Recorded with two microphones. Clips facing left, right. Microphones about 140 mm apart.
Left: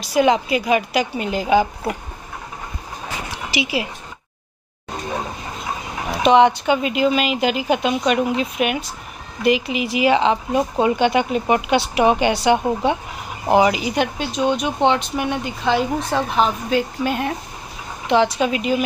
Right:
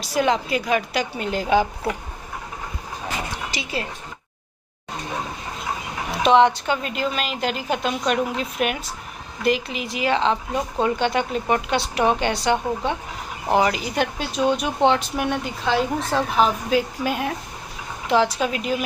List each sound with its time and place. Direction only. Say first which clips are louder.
0.0 s speech: left 4 dB; 5° left (ahead or behind)
6.2 s speech: left 3 dB; centre (ahead or behind)